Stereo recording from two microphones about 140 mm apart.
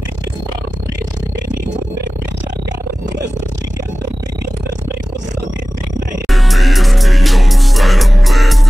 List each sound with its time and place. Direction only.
6.2 s music: centre (ahead or behind)